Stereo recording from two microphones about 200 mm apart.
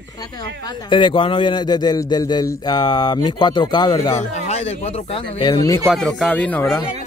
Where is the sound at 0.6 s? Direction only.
25° left (ahead or behind).